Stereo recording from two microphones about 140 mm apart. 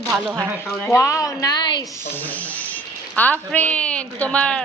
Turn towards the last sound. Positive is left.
turn(degrees=5)  # may be behind; listen again after turning